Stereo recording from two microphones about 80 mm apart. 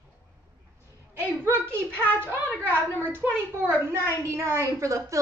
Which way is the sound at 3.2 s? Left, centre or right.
Right.